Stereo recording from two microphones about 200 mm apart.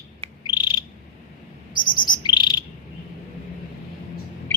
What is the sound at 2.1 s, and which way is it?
Chirp, 20° left (ahead or behind).